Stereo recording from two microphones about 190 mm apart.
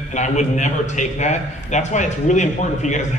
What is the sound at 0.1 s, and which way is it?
A man's voice, 40° left (ahead or behind).